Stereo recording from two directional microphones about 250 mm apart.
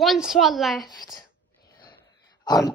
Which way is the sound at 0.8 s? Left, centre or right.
Centre.